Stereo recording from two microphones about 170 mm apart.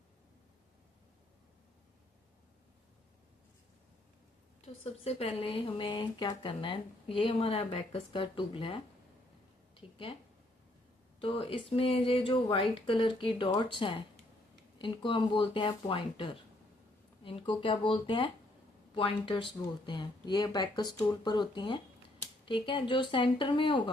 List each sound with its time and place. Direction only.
4.6 s speech: 35° left (ahead or behind)
11.2 s speech: 30° left (ahead or behind)